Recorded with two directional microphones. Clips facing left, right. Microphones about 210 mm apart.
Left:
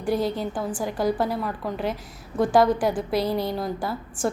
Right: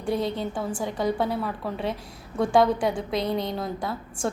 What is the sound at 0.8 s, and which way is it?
A woman's voice, centre (ahead or behind).